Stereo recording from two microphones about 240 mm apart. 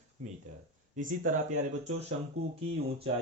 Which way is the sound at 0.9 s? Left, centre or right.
Right.